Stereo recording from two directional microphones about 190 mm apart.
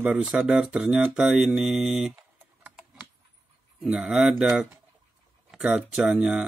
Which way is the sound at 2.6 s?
5° right (ahead or behind).